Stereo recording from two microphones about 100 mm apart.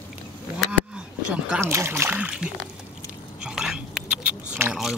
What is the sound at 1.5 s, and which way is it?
Speech, 25° right (ahead or behind).